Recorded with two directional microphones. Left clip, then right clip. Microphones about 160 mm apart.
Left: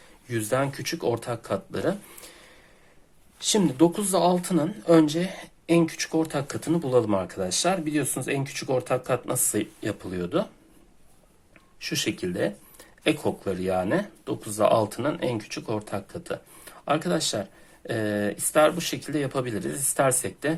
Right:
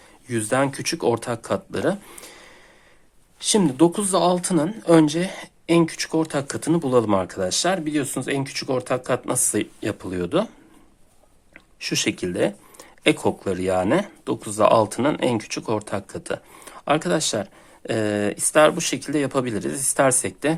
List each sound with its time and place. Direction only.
0.3 s speech: 30° right (ahead or behind)
11.8 s speech: 40° right (ahead or behind)